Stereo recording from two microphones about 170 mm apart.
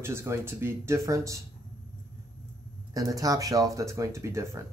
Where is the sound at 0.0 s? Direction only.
15° right (ahead or behind).